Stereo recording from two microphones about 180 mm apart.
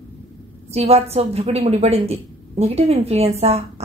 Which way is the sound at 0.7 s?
35° right (ahead or behind).